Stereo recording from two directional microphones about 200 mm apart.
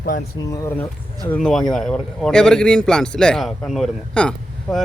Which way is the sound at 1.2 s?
5° left (ahead or behind).